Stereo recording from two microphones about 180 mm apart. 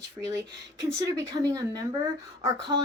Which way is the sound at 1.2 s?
20° right (ahead or behind).